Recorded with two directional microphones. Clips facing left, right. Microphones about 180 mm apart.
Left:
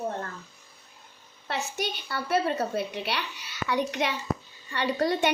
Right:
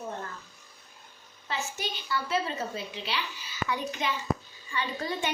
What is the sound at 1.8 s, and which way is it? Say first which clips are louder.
A woman's voice: left 1 dB; 65° left (ahead or behind).